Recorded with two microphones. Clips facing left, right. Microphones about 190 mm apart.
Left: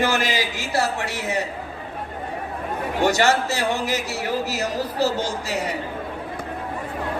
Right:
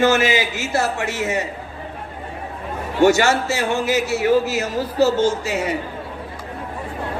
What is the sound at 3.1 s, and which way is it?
A man's voice, 35° left (ahead or behind).